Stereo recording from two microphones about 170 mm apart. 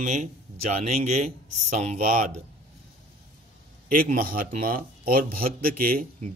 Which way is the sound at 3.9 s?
60° right (ahead or behind).